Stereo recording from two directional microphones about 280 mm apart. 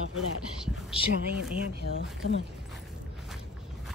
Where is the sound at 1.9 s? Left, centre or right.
Left.